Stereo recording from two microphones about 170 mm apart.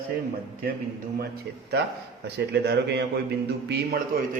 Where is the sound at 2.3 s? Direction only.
80° right.